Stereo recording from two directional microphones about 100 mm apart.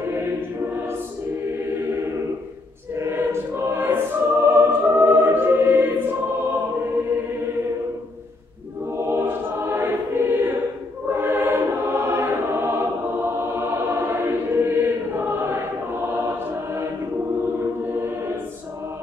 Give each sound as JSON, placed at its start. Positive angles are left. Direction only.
{"t": 3.0, "sound": "choir", "side_deg": -25}
{"t": 4.5, "sound": "music", "side_deg": -20}
{"t": 8.9, "sound": "choir", "side_deg": -25}